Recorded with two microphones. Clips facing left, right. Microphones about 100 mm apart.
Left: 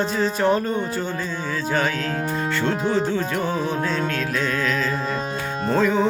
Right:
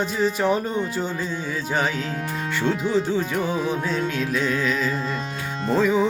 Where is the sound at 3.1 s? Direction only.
15° right (ahead or behind).